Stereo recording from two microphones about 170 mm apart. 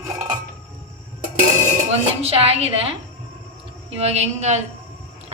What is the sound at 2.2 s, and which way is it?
Speech, 35° right (ahead or behind).